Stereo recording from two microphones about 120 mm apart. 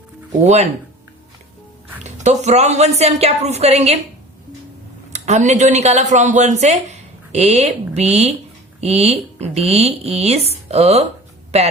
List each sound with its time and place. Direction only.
0.4 s speech: 70° right (ahead or behind)
2.0 s speech: 70° right (ahead or behind)
5.1 s speech: 75° right (ahead or behind)